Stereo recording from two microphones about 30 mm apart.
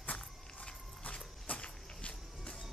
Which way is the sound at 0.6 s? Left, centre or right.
Left.